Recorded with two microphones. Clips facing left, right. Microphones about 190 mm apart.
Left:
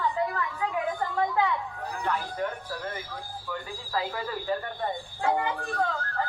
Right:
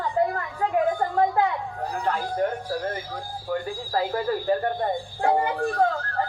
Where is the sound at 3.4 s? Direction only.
45° right (ahead or behind).